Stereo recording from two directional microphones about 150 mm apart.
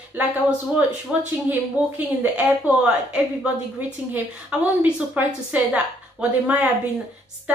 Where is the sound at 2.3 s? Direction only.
10° right (ahead or behind).